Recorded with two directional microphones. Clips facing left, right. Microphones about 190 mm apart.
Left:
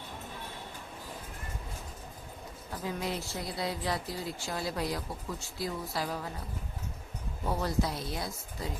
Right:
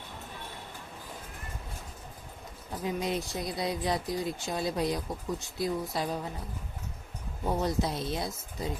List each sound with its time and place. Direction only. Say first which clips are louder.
2.8 s speech: right 4 dB; 20° right (ahead or behind)
7.6 s speech: right 1 dB; 20° right (ahead or behind)